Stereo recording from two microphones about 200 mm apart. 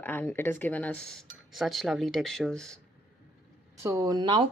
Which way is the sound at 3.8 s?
15° right (ahead or behind).